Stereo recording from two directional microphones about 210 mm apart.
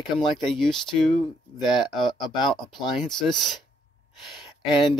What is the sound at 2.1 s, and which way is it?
Speech, 20° left (ahead or behind).